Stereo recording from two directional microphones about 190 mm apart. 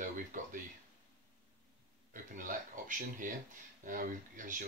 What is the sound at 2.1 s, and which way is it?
Speech, 45° right (ahead or behind).